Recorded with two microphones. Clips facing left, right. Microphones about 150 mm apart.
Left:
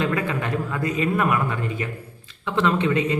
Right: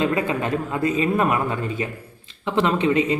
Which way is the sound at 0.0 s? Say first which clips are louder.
Right 2 dB; 20° right (ahead or behind).